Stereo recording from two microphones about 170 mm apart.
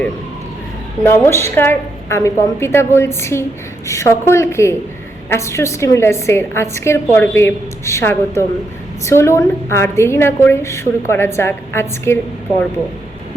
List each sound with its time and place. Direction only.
1.0 s a woman's voice: 15° left (ahead or behind)